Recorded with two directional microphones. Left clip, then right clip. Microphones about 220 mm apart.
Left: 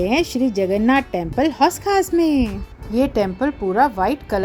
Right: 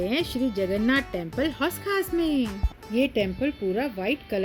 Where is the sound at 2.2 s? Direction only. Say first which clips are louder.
Left 8 dB; 30° left (ahead or behind).